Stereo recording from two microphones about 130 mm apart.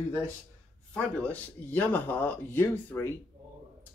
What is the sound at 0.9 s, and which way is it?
Speech, 10° left (ahead or behind).